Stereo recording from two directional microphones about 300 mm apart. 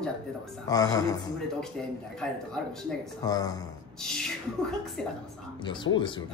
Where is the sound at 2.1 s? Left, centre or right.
Centre.